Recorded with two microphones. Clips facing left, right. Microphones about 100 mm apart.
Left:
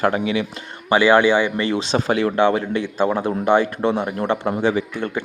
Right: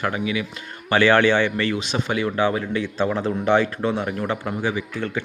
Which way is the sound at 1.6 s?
25° left (ahead or behind).